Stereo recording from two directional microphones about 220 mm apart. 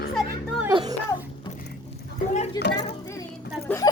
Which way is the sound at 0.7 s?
20° right (ahead or behind).